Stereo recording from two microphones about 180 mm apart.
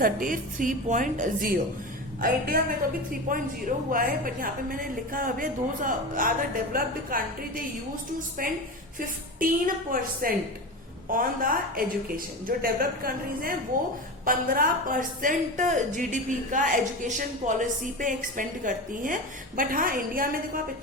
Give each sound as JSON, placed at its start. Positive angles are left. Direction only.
{"t": 0.0, "sound": "a woman's voice", "side_deg": -50}